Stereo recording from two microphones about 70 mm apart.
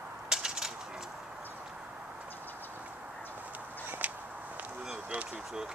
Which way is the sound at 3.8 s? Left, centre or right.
Right.